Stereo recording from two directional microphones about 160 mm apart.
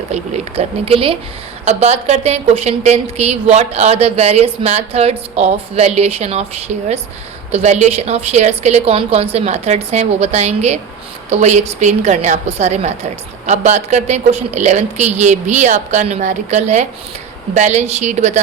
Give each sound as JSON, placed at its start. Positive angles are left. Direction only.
{"t": 0.1, "sound": "a woman's voice", "side_deg": -45}